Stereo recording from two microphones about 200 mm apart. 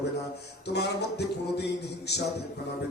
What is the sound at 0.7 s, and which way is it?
Speech, 55° left (ahead or behind).